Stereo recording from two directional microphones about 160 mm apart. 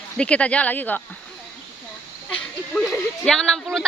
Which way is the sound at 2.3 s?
5° left (ahead or behind).